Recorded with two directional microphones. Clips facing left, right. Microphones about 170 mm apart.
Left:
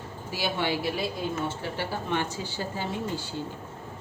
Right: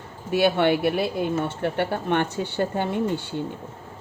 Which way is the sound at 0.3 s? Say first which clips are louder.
Right 9 dB; 60° right (ahead or behind).